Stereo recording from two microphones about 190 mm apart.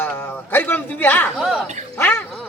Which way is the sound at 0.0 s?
10° left (ahead or behind).